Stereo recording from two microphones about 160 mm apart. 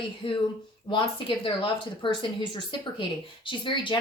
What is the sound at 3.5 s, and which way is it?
Speech, 30° left (ahead or behind).